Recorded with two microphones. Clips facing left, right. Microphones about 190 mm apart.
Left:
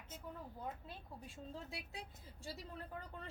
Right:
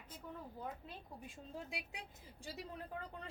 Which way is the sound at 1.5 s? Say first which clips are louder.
Right 2 dB; 15° right (ahead or behind).